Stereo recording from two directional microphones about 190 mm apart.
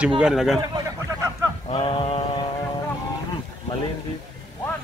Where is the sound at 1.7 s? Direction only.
25° left (ahead or behind).